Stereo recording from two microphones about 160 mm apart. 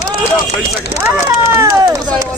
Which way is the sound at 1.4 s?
20° right (ahead or behind).